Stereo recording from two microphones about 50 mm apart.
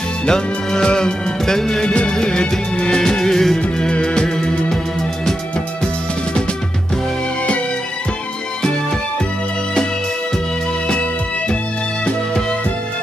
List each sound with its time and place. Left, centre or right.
0.3 s music: centre